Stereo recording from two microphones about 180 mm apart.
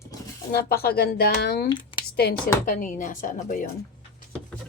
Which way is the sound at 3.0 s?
45° left (ahead or behind).